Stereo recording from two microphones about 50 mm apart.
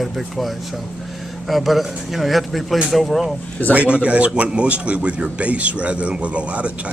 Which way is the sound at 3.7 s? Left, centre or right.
Right.